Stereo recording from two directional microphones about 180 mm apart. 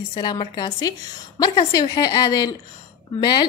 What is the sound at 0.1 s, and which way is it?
Speech, 25° left (ahead or behind).